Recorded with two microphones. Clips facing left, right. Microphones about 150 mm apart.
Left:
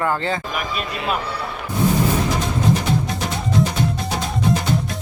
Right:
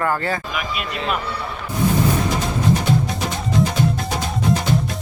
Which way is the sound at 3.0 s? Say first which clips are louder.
Even; centre (ahead or behind).